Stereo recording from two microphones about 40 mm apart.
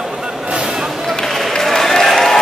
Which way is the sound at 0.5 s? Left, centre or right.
Centre.